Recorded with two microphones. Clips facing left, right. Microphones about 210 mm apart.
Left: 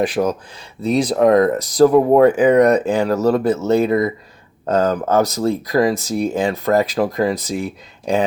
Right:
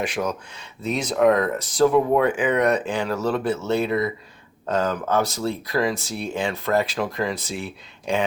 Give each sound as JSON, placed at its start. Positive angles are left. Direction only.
{"t": 0.0, "sound": "speech", "side_deg": 35}